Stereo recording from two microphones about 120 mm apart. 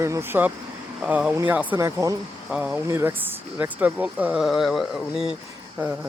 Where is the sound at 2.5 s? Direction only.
10° right (ahead or behind).